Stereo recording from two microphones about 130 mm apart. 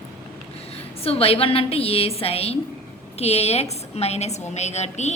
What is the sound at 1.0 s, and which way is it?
A woman's voice, 50° left (ahead or behind).